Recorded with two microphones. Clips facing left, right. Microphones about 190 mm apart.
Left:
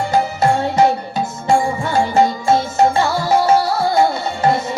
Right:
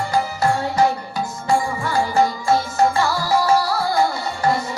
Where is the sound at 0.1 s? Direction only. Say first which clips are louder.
Left 4 dB; 20° left (ahead or behind).